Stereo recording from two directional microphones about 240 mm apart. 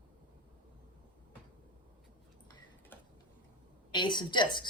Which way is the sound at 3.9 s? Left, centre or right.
Centre.